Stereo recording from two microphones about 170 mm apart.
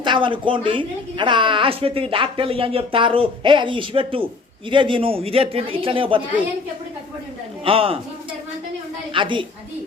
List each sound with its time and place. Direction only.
0.0 s a woman's voice: 30° right (ahead or behind)
7.6 s a woman's voice: 30° right (ahead or behind)
9.1 s a woman's voice: 30° right (ahead or behind)